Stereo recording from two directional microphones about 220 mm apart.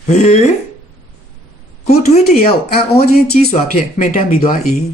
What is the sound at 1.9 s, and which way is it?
Speech, 30° left (ahead or behind).